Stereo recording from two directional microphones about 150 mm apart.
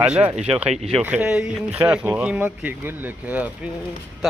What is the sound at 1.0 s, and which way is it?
Speech, 5° right (ahead or behind).